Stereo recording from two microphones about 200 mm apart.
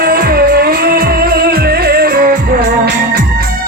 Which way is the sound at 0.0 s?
45° right (ahead or behind).